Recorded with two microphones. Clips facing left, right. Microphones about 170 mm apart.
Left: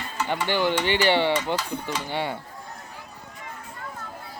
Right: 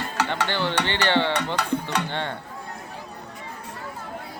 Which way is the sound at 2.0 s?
10° left (ahead or behind).